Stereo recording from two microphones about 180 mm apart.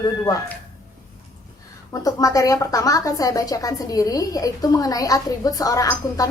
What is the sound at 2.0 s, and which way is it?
A woman's voice, 20° left (ahead or behind).